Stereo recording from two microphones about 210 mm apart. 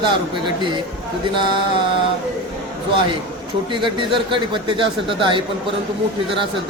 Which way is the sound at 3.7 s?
25° right (ahead or behind).